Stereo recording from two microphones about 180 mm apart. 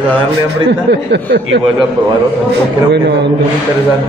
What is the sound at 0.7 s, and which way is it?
Speech, 75° right (ahead or behind).